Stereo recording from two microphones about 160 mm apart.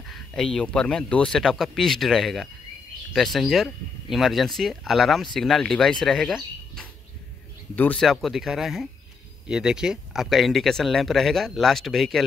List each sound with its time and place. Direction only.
0.1 s speech: 5° left (ahead or behind)